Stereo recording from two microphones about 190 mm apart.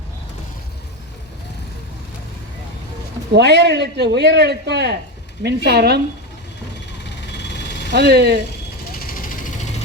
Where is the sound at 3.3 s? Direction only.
60° right (ahead or behind).